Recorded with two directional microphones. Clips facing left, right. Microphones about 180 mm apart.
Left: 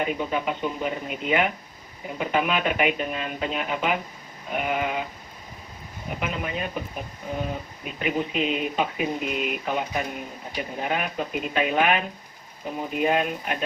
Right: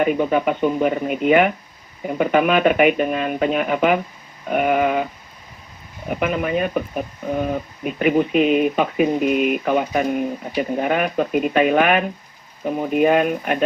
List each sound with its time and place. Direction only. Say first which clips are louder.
0.0 s speech: right 8 dB; 55° right (ahead or behind)
6.1 s speech: right 9 dB; 55° right (ahead or behind)